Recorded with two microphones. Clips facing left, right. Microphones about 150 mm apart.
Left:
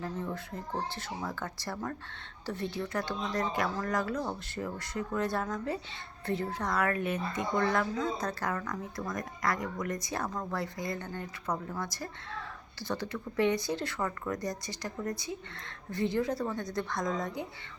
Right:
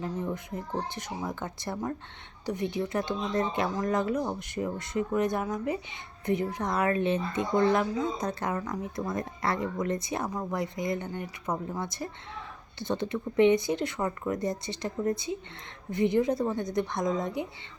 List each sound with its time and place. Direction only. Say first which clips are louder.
0.0 s speech: right 3 dB; 20° right (ahead or behind)